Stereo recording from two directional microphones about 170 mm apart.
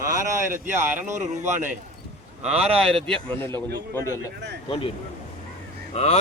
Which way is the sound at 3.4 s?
10° left (ahead or behind).